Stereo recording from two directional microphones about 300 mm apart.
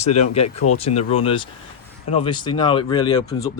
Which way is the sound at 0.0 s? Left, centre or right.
Left.